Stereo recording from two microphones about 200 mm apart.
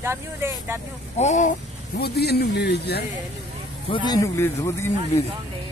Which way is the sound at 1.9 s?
55° left (ahead or behind).